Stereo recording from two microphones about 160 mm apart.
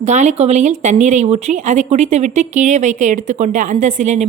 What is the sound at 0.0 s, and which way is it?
Speech, 45° right (ahead or behind).